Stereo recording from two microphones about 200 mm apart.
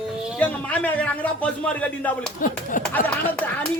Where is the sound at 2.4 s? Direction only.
40° left (ahead or behind).